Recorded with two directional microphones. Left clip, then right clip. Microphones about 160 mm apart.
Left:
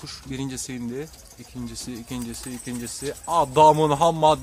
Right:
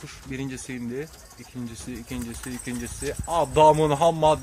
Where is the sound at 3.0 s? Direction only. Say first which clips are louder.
Left 3 dB; 15° left (ahead or behind).